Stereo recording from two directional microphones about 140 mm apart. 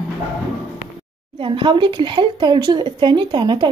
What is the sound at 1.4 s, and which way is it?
A woman's voice, 35° right (ahead or behind).